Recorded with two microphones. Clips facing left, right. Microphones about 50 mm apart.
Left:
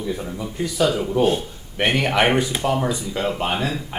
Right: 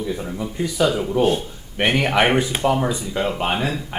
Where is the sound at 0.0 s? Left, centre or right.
Centre.